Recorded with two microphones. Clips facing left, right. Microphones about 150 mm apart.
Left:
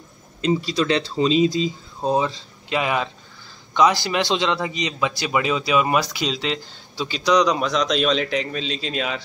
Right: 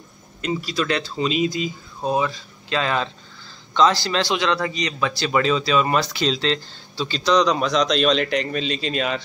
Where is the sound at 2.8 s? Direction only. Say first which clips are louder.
Even; 10° left (ahead or behind).